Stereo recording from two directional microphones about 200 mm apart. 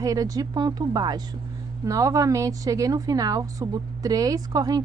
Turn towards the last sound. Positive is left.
turn(degrees=-20)  # may be behind; listen again after turning